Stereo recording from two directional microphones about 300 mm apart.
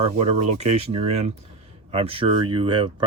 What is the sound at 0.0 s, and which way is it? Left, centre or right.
Speech, right.